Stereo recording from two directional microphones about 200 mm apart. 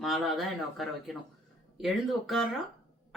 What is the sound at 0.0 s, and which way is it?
A man's voice, centre (ahead or behind).